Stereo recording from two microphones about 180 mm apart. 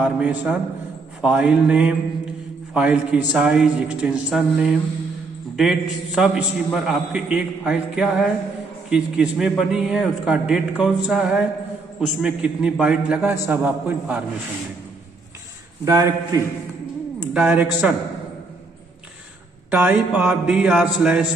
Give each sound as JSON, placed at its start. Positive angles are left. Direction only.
{"t": 0.0, "sound": "a man's voice", "side_deg": -10}
{"t": 15.8, "sound": "a man's voice", "side_deg": -20}
{"t": 17.3, "sound": "a man's voice", "side_deg": -5}
{"t": 19.7, "sound": "a man's voice", "side_deg": -10}